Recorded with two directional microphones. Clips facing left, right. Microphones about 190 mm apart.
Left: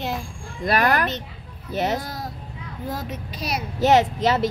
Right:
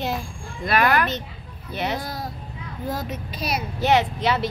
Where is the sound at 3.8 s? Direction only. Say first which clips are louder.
Left 3 dB; 45° left (ahead or behind).